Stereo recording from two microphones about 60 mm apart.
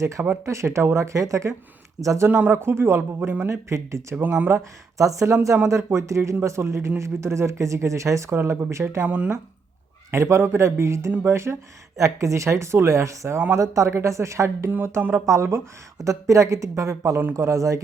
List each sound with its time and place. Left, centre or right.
0.0 s speech: right
2.3 s a man's voice: right
3.7 s a man's voice: right
9.0 s speech: right
10.1 s a man's voice: right
11.9 s a man's voice: right